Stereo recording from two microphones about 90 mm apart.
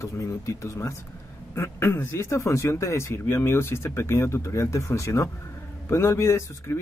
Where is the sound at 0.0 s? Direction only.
35° left (ahead or behind).